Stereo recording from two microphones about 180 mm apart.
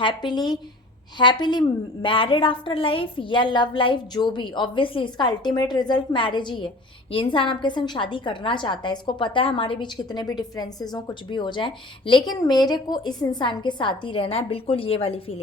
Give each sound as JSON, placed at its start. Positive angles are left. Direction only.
{"t": 0.0, "sound": "a woman's voice", "side_deg": 25}